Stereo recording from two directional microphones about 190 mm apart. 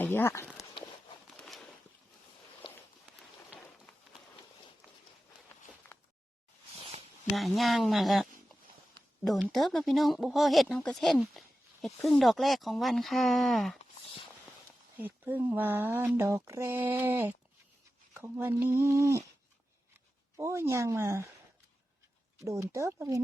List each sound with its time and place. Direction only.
0.0 s speech: 10° left (ahead or behind)
1.4 s a sound: centre (ahead or behind)
2.6 s walk: 25° left (ahead or behind)
5.9 s a sound: 10° left (ahead or behind)
7.3 s speech: centre (ahead or behind)
14.9 s speech: 10° right (ahead or behind)
20.3 s speech: 15° right (ahead or behind)
22.4 s speech: 15° right (ahead or behind)